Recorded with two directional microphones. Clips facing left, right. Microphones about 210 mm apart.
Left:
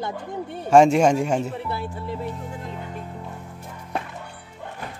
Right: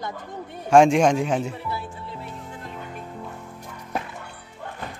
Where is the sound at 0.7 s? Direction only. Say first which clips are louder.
Left 1 dB; 5° left (ahead or behind).